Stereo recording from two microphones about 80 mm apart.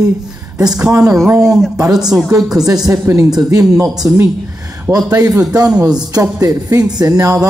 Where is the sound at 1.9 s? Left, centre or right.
Centre.